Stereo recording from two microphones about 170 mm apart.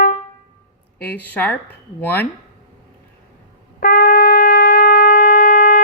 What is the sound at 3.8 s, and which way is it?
Shofar, 60° left (ahead or behind).